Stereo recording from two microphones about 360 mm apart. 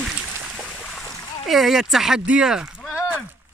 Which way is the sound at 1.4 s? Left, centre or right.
Centre.